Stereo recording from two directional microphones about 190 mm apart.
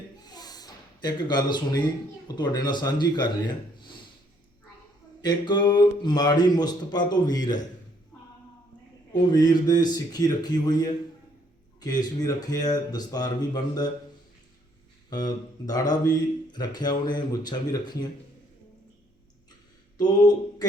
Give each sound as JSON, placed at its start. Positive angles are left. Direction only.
{"t": 0.2, "sound": "a sound", "side_deg": 20}
{"t": 2.2, "sound": "speech", "side_deg": 20}
{"t": 5.2, "sound": "speech", "side_deg": 20}
{"t": 9.3, "sound": "speech", "side_deg": 20}
{"t": 15.1, "sound": "speech", "side_deg": 20}
{"t": 20.0, "sound": "mantra", "side_deg": 20}